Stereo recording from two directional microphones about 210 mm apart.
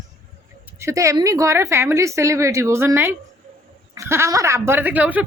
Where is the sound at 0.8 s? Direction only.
15° right (ahead or behind).